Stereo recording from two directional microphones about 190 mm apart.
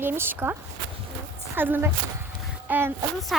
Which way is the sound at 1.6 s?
10° right (ahead or behind).